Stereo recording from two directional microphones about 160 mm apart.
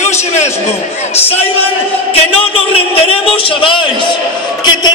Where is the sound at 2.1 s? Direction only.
35° left (ahead or behind).